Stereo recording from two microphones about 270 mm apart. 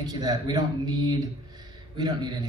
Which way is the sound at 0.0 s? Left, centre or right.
Centre.